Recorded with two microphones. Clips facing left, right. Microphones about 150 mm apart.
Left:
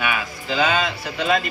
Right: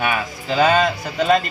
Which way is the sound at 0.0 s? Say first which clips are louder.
Right 3 dB; 40° right (ahead or behind).